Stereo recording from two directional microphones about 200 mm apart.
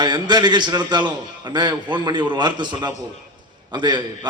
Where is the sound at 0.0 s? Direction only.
20° right (ahead or behind).